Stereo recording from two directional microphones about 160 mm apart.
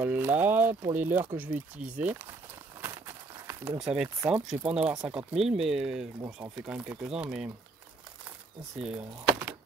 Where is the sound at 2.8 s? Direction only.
20° right (ahead or behind).